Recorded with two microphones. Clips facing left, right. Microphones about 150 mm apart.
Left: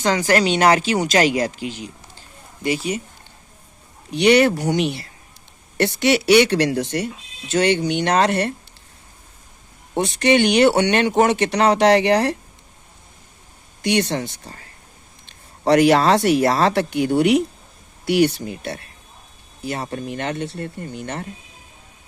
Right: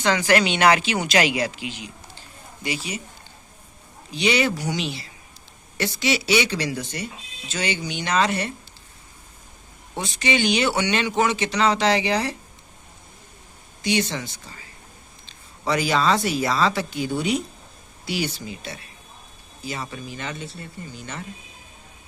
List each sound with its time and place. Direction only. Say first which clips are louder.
0.0 s speech: left 2 dB; 40° left (ahead or behind)
4.1 s speech: left 8 dB; 60° left (ahead or behind)
10.0 s speech: left 7 dB; 65° left (ahead or behind)
13.8 s speech: left 4 dB; 65° left (ahead or behind)